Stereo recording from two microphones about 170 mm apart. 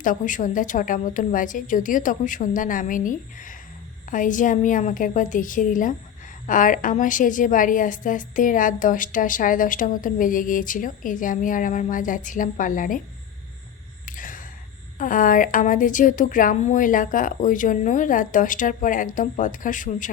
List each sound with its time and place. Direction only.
0.0 s a woman's voice: 50° left (ahead or behind)
14.0 s gasp: 50° left (ahead or behind)
14.9 s a woman's voice: 50° left (ahead or behind)